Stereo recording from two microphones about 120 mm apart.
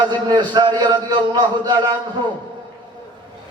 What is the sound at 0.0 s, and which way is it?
A man's voice, 40° right (ahead or behind).